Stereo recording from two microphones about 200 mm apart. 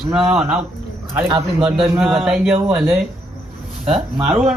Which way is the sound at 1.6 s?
5° right (ahead or behind).